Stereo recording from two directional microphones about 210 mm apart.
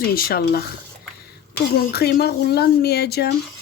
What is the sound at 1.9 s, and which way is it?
Speech, 50° left (ahead or behind).